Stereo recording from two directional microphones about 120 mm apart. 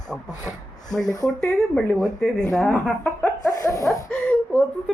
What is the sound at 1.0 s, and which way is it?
Speech, 30° left (ahead or behind).